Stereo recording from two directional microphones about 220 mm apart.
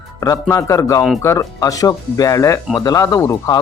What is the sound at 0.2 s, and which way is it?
Speech, 15° left (ahead or behind).